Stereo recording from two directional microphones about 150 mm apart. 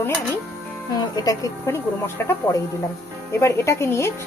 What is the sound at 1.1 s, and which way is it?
Speech, 25° left (ahead or behind).